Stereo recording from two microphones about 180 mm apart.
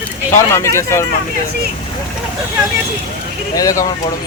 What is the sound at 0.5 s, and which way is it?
Speech, 15° left (ahead or behind).